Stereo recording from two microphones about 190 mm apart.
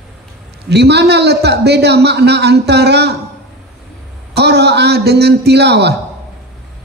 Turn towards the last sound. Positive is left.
turn(degrees=-60)  # may be behind; listen again after turning